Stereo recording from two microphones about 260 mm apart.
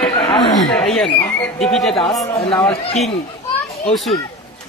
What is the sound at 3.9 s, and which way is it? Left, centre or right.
Speech, centre.